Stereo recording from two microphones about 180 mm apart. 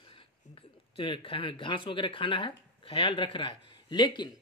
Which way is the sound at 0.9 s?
30° left (ahead or behind).